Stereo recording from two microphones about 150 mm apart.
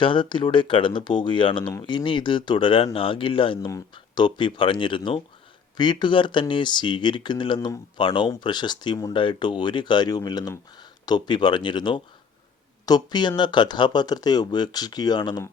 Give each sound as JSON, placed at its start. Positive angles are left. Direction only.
{"t": 0.0, "sound": "speech", "side_deg": 35}